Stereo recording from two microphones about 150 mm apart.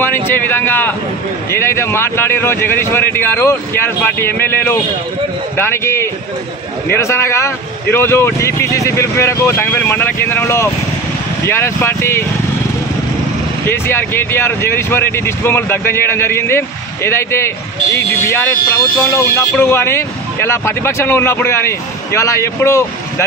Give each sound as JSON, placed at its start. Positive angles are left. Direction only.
{"t": 0.0, "sound": "speech", "side_deg": 15}
{"t": 13.7, "sound": "speech", "side_deg": 15}